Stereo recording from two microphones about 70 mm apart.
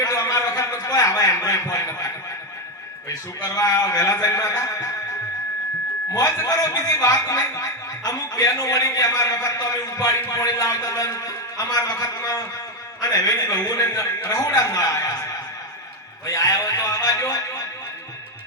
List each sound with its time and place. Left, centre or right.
0.0 s a sound: left
3.1 s a man's voice: left
6.1 s a man's voice: left